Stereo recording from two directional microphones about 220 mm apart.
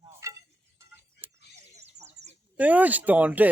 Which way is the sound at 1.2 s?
10° right (ahead or behind).